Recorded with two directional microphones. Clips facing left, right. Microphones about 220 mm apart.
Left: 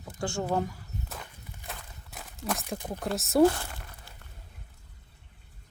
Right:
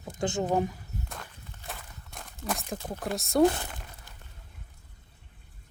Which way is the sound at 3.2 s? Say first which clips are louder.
Left 1 dB; centre (ahead or behind).